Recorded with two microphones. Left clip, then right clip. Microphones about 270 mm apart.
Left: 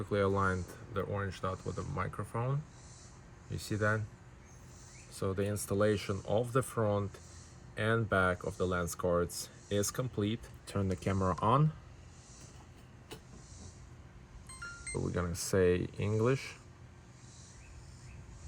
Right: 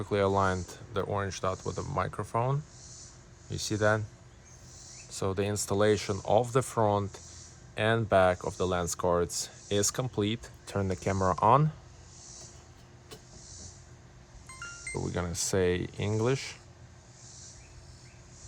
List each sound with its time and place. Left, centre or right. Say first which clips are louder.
0.0 s speech: right 5 dB; centre
5.2 s speech: right 4 dB; right
15.1 s speech: right 2 dB; centre